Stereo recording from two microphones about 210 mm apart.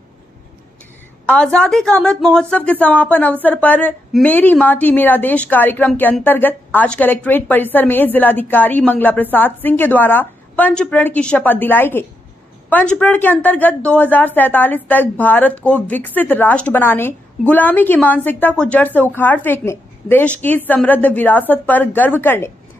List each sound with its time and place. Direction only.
1.2 s a woman's voice: 5° left (ahead or behind)